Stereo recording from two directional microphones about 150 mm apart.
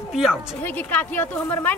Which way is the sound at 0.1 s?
5° right (ahead or behind).